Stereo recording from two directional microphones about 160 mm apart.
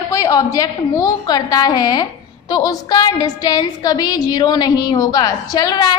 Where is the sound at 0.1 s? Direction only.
25° left (ahead or behind).